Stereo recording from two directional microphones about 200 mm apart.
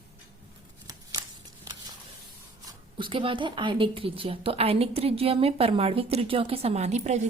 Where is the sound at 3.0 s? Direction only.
25° right (ahead or behind).